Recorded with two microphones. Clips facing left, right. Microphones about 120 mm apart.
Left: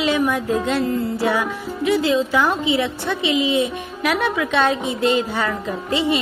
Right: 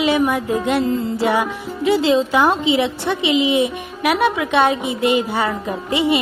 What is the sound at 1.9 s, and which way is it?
Music, 30° right (ahead or behind).